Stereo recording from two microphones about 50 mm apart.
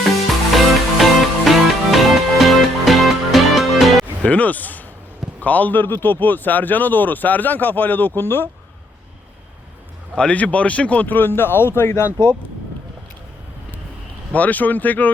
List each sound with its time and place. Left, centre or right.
0.5 s music: centre
4.2 s speech: left
10.2 s speech: left
11.1 s speech: left
14.3 s speech: left